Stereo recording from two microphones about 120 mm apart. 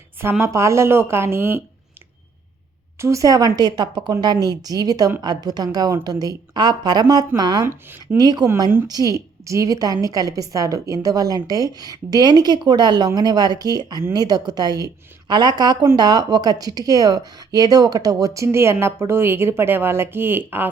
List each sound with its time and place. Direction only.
0.4 s speech: 25° right (ahead or behind)
3.0 s a woman's voice: 25° right (ahead or behind)
7.6 s speech: 20° right (ahead or behind)
8.0 s a woman's voice: 35° right (ahead or behind); by 20.7 s 15° right (ahead or behind)